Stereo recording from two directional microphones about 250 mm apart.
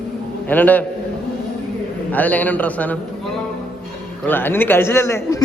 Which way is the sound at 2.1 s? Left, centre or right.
Centre.